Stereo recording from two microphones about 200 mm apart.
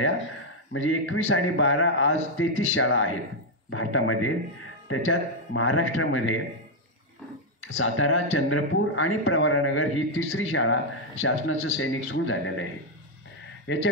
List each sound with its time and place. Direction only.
0.7 s a man's voice: 80° left
7.6 s speech: 85° left
13.7 s speech: 65° left (ahead or behind)